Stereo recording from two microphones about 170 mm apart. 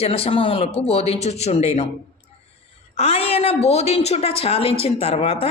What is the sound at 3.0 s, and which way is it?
Speech, 35° left (ahead or behind).